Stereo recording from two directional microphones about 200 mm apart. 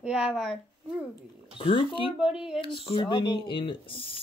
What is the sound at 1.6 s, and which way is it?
Speech, 25° left (ahead or behind).